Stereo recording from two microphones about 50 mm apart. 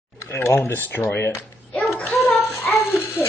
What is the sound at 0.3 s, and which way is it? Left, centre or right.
Speech, left.